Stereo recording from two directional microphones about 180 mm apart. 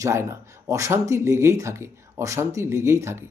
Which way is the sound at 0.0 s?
15° right (ahead or behind).